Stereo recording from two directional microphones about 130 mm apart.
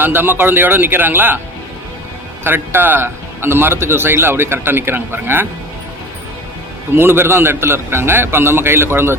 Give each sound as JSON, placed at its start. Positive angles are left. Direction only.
{"t": 0.0, "sound": "a man's voice", "side_deg": -15}
{"t": 2.4, "sound": "a man's voice", "side_deg": -15}
{"t": 6.9, "sound": "a man's voice", "side_deg": -15}